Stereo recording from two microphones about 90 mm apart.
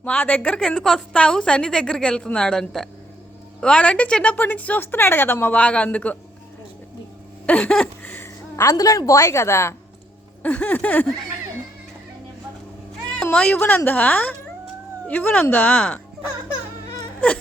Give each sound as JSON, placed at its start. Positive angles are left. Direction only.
{"t": 0.0, "sound": "speech", "side_deg": 15}
{"t": 7.4, "sound": "a sound", "side_deg": 15}
{"t": 8.7, "sound": "a woman's voice", "side_deg": 45}
{"t": 10.4, "sound": "speech", "side_deg": 20}
{"t": 13.3, "sound": "a woman's voice", "side_deg": 15}
{"t": 17.2, "sound": "speech", "side_deg": 10}